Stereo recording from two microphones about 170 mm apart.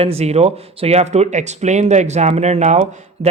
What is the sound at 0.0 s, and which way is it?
Speech, 35° right (ahead or behind).